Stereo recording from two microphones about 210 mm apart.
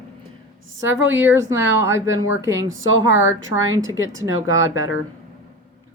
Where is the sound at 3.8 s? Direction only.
70° right (ahead or behind).